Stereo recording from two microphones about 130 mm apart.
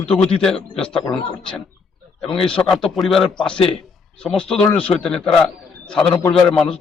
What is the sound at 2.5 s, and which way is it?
A man's voice, 5° left (ahead or behind).